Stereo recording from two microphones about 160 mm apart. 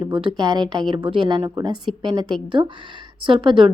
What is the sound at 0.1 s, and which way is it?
A woman's voice, 25° right (ahead or behind).